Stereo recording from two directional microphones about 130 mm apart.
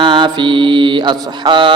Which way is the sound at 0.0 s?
35° right (ahead or behind).